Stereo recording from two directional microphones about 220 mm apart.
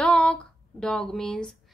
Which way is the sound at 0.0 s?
5° left (ahead or behind).